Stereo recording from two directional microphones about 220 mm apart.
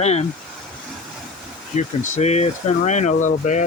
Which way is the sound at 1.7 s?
30° left (ahead or behind).